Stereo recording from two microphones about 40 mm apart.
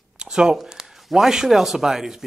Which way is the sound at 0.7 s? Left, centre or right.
Centre.